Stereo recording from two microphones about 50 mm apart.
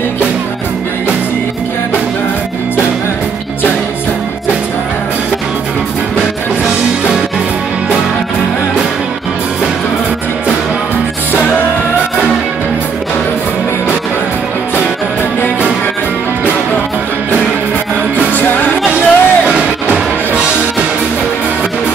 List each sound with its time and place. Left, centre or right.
18.3 s music: left
18.9 s music: right